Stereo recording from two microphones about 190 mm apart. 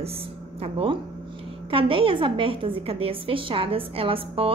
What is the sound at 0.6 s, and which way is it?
A woman's voice, 30° right (ahead or behind).